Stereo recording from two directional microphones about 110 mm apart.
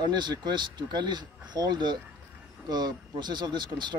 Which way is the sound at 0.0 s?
40° right (ahead or behind).